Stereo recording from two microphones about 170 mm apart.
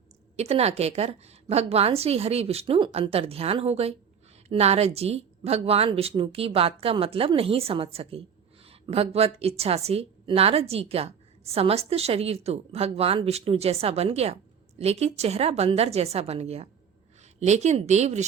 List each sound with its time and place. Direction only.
0.3 s a woman's voice: 40° right (ahead or behind)